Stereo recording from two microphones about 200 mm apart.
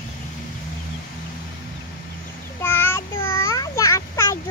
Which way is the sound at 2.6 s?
10° left (ahead or behind).